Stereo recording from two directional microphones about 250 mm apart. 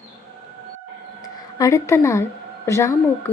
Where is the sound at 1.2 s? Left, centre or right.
Centre.